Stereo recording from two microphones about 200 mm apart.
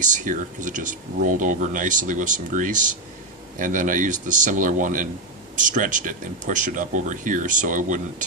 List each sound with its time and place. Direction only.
0.0 s speech: 40° right (ahead or behind)